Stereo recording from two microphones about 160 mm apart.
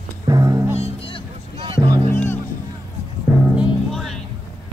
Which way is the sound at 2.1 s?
15° left (ahead or behind).